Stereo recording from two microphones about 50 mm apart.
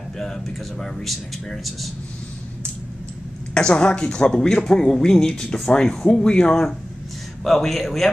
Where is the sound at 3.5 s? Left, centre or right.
Centre.